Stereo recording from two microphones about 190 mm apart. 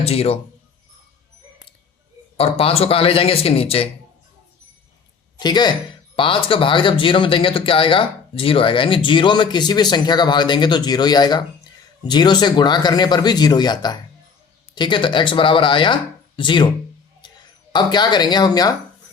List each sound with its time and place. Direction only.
0.0 s speech: 30° left (ahead or behind)
2.4 s speech: 30° left (ahead or behind)
5.4 s speech: 20° left (ahead or behind)